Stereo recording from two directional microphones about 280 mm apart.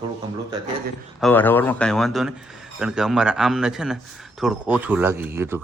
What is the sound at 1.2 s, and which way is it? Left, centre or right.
Speech, centre.